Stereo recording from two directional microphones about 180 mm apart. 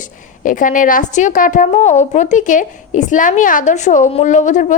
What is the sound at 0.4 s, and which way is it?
A woman's voice, 45° left (ahead or behind).